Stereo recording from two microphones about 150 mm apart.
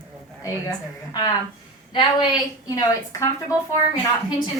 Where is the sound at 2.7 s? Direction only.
25° left (ahead or behind).